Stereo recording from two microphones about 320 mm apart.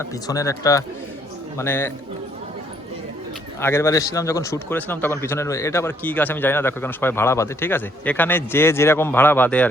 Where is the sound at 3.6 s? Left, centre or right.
Centre.